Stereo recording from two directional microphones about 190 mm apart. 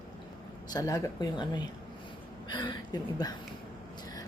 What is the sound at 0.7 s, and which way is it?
A woman's voice, 20° left (ahead or behind).